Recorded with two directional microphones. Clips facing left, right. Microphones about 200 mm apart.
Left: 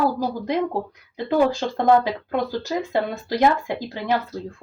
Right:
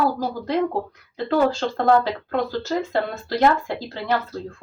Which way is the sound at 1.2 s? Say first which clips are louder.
Even; 15° left (ahead or behind).